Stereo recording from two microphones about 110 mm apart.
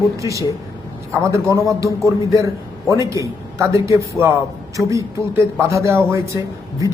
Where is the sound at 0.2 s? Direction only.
30° right (ahead or behind).